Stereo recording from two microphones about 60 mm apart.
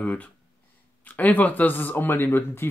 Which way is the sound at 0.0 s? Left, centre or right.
Left.